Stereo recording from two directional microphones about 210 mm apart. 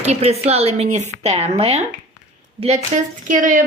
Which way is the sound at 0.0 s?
30° right (ahead or behind).